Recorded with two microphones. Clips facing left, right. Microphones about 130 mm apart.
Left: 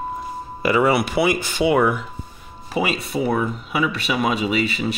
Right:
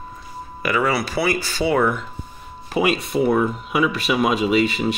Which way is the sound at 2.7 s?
Centre (ahead or behind).